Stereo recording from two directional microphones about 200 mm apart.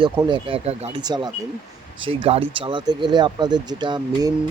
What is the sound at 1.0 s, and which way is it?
Speech, 20° right (ahead or behind).